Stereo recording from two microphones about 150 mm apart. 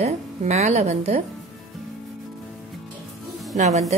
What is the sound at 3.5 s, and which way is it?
Speech, 50° right (ahead or behind).